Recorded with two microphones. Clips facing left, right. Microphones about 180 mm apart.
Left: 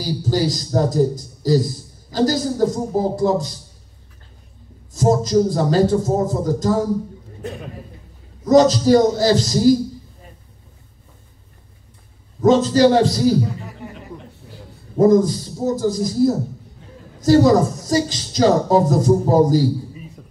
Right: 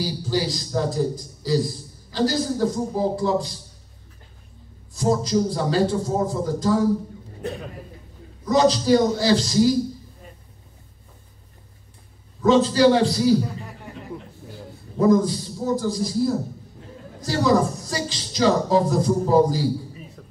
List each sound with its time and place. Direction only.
0.0 s speech: 45° left (ahead or behind)
2.0 s speech: 40° left (ahead or behind)
4.9 s speech: 45° left (ahead or behind)
8.5 s speech: 45° left (ahead or behind)
12.4 s speech: 45° left (ahead or behind)
15.0 s speech: 45° left (ahead or behind)